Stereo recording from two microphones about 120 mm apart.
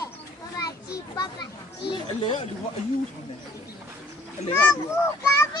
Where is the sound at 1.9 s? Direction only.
45° left (ahead or behind).